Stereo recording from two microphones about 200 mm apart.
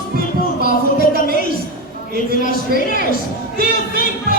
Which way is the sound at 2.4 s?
50° right (ahead or behind).